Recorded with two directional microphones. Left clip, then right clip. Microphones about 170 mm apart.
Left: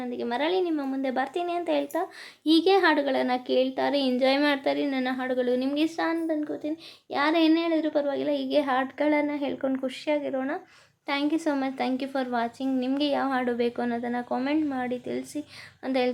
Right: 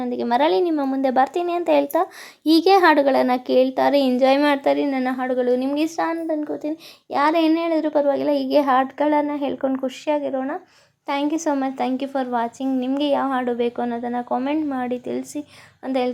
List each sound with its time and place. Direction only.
0.0 s a woman's voice: 45° right (ahead or behind)
4.1 s a child's voice: 25° right (ahead or behind)